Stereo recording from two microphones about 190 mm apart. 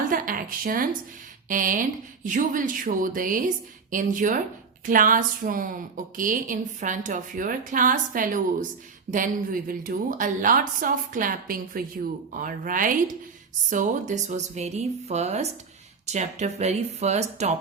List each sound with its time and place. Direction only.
0.1 s a woman's voice: 45° right (ahead or behind)